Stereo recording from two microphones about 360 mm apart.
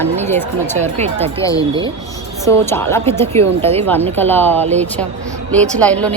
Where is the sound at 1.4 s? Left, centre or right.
Centre.